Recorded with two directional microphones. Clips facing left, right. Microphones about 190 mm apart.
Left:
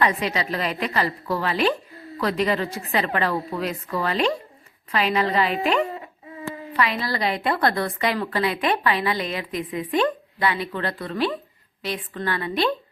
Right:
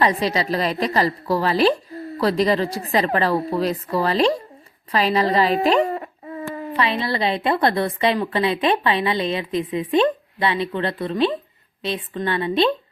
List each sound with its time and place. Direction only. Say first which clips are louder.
0.0 s a woman's voice: right 3 dB; 35° right (ahead or behind)
6.7 s a woman's voice: right 2 dB; 25° right (ahead or behind)